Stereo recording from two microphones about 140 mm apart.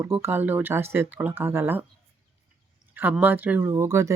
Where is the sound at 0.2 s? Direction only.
15° right (ahead or behind).